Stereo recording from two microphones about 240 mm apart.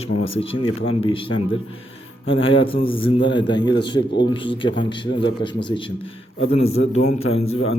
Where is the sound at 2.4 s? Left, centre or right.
Left.